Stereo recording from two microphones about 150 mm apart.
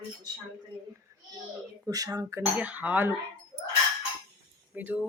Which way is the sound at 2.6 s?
10° right (ahead or behind).